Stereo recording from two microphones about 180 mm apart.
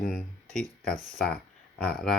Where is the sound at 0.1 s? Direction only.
5° right (ahead or behind).